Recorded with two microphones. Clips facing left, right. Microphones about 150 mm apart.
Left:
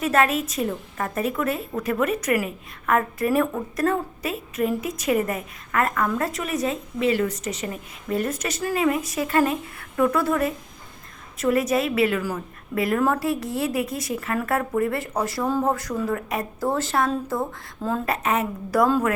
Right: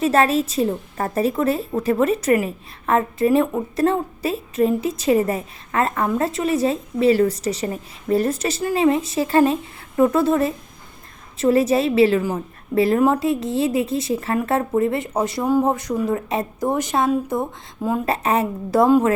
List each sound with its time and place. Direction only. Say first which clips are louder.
0.0 s a woman's voice: right 4 dB; 30° right (ahead or behind)
18.0 s a woman's voice: right 4 dB; 30° right (ahead or behind)